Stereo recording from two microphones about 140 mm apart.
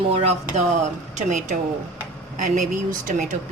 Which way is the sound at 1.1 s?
60° right (ahead or behind).